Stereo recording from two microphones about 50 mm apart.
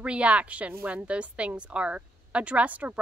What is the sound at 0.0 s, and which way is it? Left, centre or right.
A woman's voice, right.